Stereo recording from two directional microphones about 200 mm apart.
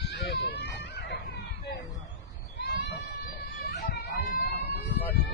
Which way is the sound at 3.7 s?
55° left (ahead or behind).